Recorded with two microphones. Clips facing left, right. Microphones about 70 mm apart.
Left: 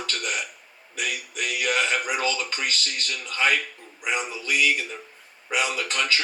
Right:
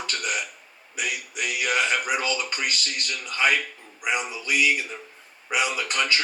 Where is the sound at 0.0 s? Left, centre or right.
Centre.